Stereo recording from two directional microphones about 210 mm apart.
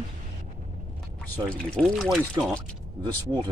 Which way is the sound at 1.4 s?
5° left (ahead or behind).